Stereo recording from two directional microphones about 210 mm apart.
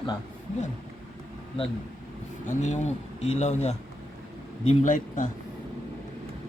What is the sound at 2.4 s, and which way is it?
Speech, 35° left (ahead or behind).